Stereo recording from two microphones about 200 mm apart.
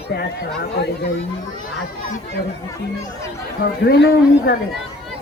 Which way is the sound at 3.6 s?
50° left (ahead or behind).